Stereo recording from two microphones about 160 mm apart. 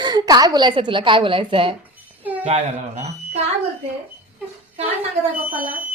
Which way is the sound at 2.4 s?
45° right (ahead or behind).